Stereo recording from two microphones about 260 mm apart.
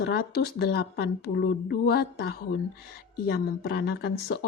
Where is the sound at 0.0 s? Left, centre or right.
Left.